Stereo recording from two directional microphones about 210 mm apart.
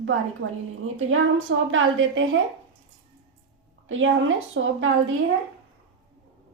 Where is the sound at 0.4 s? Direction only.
55° right (ahead or behind).